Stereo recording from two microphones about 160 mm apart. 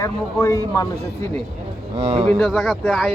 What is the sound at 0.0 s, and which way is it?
Speech, 20° left (ahead or behind).